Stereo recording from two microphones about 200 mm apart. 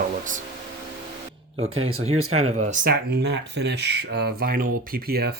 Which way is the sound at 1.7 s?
90° right.